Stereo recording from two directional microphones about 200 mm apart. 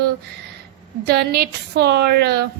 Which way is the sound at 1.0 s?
50° right (ahead or behind).